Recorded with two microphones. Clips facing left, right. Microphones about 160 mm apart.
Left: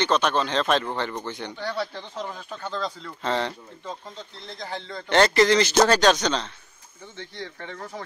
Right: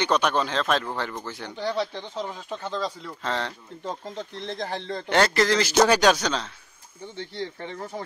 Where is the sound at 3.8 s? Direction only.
55° right (ahead or behind).